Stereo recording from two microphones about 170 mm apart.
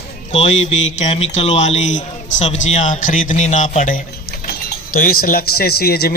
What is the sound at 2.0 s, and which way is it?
A man's voice, 45° left (ahead or behind).